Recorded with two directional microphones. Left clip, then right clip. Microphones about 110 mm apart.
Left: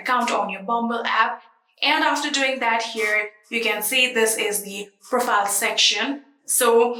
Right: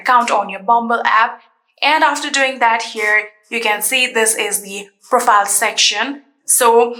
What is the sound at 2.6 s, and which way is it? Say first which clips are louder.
Speech: right 7 dB; 20° left (ahead or behind).